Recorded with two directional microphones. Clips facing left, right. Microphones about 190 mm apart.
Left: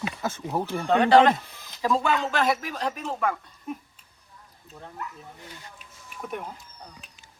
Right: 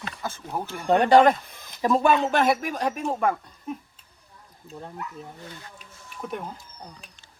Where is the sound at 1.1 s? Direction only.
15° right (ahead or behind).